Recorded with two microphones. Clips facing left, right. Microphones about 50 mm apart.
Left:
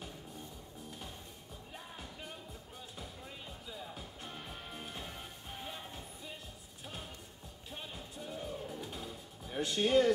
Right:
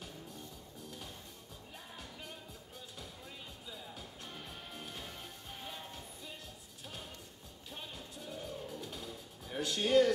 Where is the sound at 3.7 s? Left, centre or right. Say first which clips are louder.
Left 2 dB; centre.